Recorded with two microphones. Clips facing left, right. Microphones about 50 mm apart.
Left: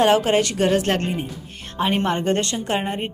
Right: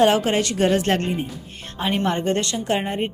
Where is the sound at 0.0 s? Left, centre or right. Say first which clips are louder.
Left 1 dB; centre.